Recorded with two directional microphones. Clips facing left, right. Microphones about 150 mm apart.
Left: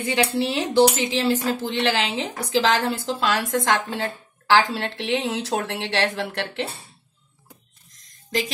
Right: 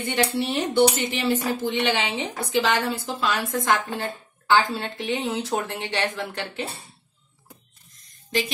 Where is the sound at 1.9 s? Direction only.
90° left; by 6.6 s 70° left (ahead or behind).